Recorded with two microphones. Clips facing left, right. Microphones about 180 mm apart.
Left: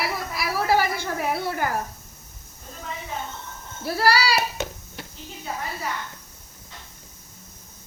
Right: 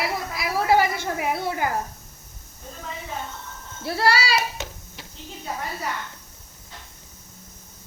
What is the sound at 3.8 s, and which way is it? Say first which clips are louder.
Speech: left 1 dB; 25° right (ahead or behind).